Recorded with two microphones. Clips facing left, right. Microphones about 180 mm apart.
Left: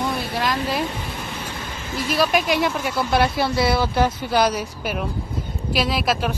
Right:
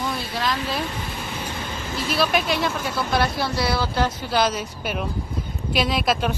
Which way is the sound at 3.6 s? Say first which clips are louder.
Left 4 dB; 20° left (ahead or behind).